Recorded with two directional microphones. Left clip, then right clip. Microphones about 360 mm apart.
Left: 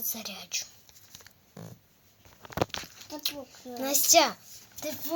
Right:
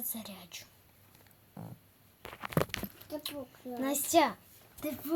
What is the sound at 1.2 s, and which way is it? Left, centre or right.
Pig, left.